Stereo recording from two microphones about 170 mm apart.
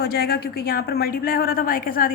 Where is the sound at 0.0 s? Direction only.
65° left (ahead or behind).